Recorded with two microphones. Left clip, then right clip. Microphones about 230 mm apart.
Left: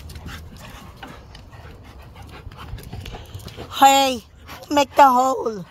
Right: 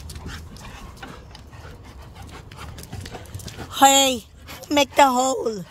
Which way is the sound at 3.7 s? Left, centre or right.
Centre.